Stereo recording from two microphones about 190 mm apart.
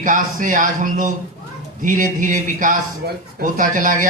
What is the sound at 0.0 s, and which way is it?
Speech, 45° right (ahead or behind).